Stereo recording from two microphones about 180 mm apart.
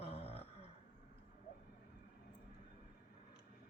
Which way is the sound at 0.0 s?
35° left (ahead or behind).